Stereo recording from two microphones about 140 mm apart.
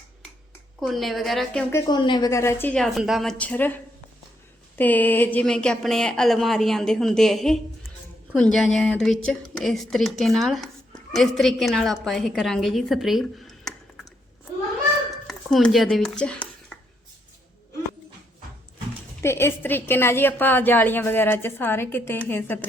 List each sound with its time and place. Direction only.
0.8 s a woman's voice: centre (ahead or behind)
1.9 s a woman's voice: 30° left (ahead or behind)
2.7 s a woman's voice: centre (ahead or behind)
4.8 s a woman's voice: 10° left (ahead or behind)
15.3 s speech: 5° left (ahead or behind)
19.2 s a woman's voice: 15° left (ahead or behind)